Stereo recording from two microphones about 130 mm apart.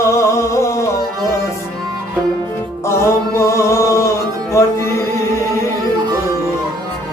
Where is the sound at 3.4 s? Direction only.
25° left (ahead or behind).